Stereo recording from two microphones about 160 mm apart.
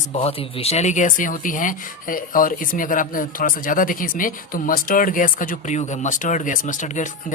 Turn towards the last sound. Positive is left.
turn(degrees=50)  # may be behind; listen again after turning